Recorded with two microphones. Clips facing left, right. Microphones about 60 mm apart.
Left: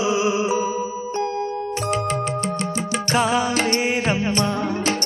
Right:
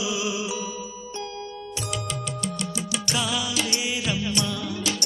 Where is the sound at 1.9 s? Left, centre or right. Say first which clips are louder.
Left 9 dB; left.